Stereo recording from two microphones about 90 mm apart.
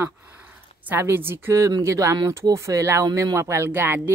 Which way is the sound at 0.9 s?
25° right (ahead or behind).